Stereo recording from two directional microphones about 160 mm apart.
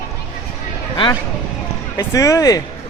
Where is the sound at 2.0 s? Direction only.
20° left (ahead or behind).